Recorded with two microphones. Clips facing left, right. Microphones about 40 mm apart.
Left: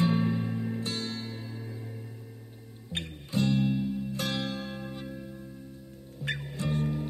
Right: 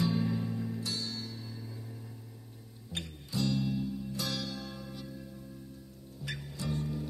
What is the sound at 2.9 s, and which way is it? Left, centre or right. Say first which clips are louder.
Music: left 4 dB; left.